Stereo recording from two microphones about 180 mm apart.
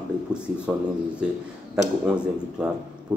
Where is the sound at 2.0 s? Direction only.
5° right (ahead or behind).